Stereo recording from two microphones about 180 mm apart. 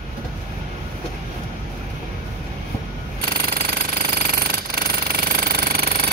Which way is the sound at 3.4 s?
60° right (ahead or behind).